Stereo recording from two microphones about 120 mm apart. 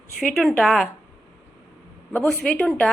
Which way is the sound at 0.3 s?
Centre (ahead or behind).